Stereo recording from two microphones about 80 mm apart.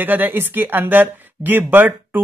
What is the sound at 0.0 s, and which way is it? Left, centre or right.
Speech, right.